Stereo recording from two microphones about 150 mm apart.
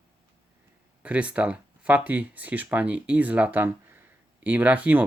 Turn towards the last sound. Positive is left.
turn(degrees=-10)  # may be behind; listen again after turning